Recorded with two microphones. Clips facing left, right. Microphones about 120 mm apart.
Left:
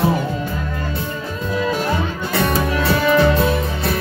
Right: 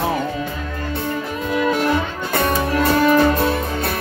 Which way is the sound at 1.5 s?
60° right (ahead or behind).